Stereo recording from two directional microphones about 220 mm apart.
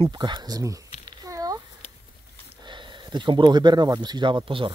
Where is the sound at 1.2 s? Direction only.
15° right (ahead or behind).